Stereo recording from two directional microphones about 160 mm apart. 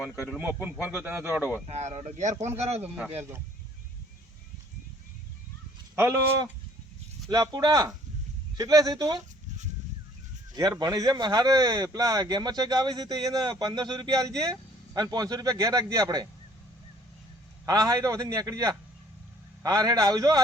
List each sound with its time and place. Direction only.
0.3 s speech: 10° right (ahead or behind)
1.6 s speech: 40° right (ahead or behind)
6.0 s speech: 15° right (ahead or behind)
10.5 s speech: 25° right (ahead or behind)
17.7 s speech: 20° right (ahead or behind)